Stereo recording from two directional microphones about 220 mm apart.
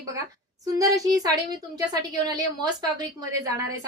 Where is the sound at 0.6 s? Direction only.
15° right (ahead or behind).